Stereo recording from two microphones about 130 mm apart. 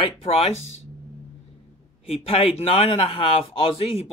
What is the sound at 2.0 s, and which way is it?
A man's voice, 50° left (ahead or behind).